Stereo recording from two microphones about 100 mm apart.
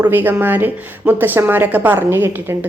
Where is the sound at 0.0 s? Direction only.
20° right (ahead or behind).